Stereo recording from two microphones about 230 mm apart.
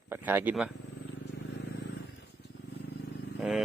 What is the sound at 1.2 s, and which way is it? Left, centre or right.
Vehicle, left.